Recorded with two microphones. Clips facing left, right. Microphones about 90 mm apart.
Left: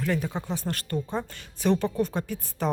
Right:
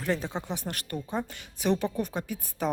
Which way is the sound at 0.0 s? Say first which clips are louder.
Left 2 dB; 25° right (ahead or behind).